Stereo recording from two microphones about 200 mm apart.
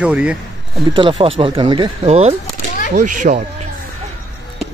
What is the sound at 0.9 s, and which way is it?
Speech, 25° right (ahead or behind).